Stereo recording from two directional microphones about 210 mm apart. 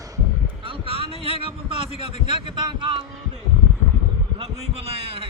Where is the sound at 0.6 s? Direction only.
25° right (ahead or behind).